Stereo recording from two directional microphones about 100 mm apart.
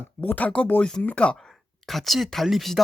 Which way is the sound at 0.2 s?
15° left (ahead or behind).